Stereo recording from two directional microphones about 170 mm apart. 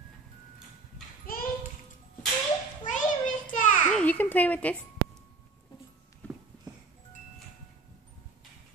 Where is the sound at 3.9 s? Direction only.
5° left (ahead or behind).